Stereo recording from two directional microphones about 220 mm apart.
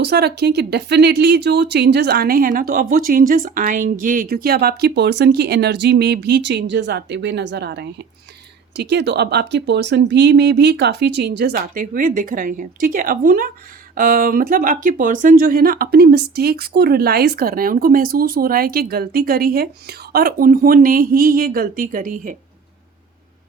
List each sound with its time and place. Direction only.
0.0 s speech: 50° right (ahead or behind)